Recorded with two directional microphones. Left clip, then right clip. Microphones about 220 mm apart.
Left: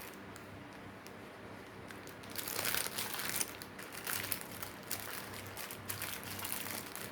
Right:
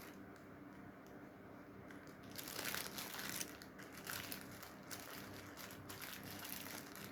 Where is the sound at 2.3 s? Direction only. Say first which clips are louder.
Left 8 dB; 10° left (ahead or behind).